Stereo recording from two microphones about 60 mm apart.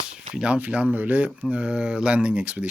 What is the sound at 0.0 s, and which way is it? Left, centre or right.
Speech, centre.